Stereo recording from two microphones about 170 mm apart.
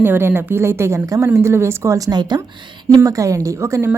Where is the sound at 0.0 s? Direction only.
15° right (ahead or behind).